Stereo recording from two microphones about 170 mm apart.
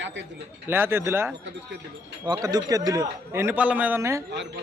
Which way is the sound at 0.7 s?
15° right (ahead or behind).